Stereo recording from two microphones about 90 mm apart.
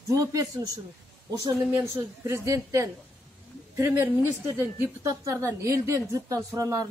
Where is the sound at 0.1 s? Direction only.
40° right (ahead or behind).